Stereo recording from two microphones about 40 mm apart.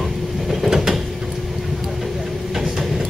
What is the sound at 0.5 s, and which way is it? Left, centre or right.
Mechanisms, centre.